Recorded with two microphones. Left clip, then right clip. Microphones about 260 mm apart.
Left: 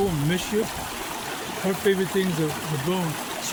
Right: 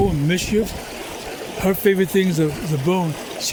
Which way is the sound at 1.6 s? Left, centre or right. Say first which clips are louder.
Right 6 dB; right.